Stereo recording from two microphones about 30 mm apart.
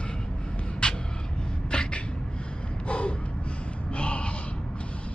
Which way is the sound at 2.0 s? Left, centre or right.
Left.